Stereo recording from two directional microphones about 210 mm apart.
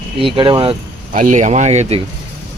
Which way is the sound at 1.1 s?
35° right (ahead or behind).